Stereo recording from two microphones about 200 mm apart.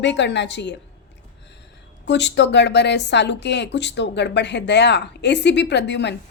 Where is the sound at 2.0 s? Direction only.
60° left (ahead or behind).